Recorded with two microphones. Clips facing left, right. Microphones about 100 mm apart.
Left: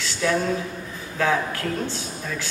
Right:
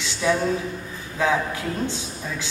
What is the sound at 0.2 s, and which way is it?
Speech, 10° right (ahead or behind).